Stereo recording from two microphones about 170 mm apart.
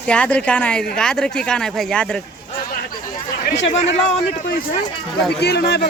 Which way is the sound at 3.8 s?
40° left (ahead or behind).